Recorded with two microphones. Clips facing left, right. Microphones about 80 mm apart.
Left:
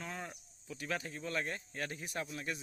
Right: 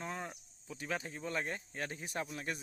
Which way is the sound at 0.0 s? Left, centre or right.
Right.